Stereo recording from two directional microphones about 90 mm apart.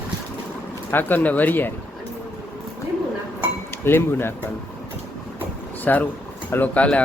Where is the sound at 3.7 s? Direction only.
25° left (ahead or behind).